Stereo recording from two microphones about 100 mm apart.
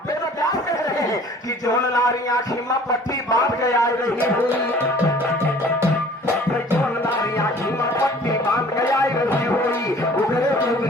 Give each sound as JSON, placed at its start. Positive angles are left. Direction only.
{"t": 1.6, "sound": "a man's voice", "side_deg": 40}
{"t": 3.2, "sound": "a man's voice", "side_deg": 35}
{"t": 7.9, "sound": "music", "side_deg": 30}